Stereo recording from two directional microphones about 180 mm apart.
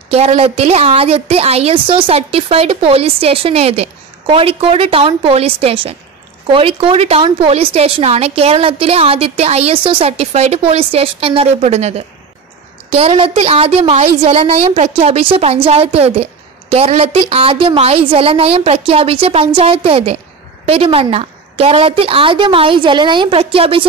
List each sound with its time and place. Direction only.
0.1 s a woman's voice: 35° right (ahead or behind)
12.9 s a woman's voice: 30° right (ahead or behind)